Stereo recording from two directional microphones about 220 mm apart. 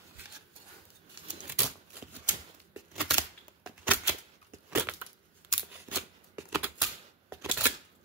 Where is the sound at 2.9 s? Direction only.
5° right (ahead or behind).